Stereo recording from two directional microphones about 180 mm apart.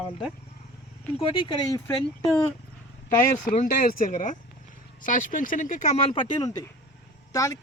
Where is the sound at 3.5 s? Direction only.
45° left (ahead or behind).